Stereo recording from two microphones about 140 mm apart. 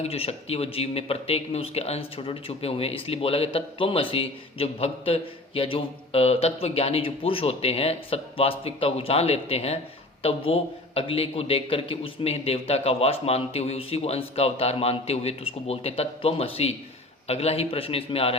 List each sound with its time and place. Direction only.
0.0 s speech: 45° left (ahead or behind)